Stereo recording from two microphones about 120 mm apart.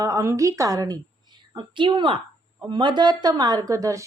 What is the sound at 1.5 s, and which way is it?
A woman's voice, 40° right (ahead or behind).